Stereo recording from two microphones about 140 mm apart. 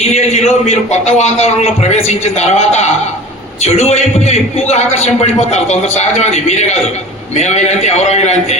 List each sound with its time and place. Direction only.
0.1 s a man's voice: 50° left (ahead or behind)